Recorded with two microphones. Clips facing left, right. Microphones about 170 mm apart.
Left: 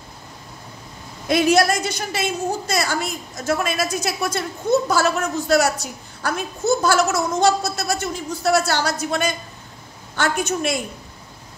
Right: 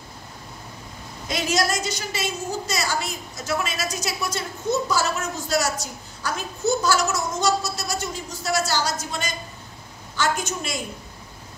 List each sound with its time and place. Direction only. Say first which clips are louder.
1.3 s a woman's voice: left 7 dB; 60° left (ahead or behind)